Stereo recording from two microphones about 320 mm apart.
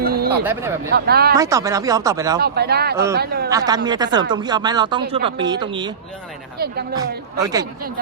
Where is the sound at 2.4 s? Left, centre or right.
Right.